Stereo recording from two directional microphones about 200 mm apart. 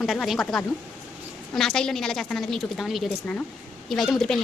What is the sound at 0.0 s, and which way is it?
A woman's voice, centre (ahead or behind).